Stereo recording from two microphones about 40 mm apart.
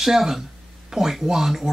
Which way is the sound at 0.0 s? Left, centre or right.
Centre.